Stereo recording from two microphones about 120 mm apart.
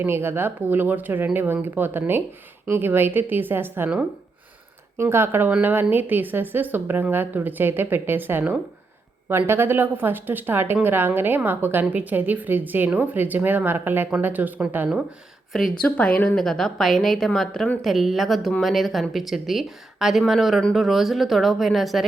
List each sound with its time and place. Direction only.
0.0 s a woman's voice: 20° right (ahead or behind)
15.8 s a woman's voice: 10° left (ahead or behind)